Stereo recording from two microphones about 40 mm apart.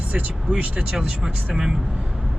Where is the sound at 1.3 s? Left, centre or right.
Right.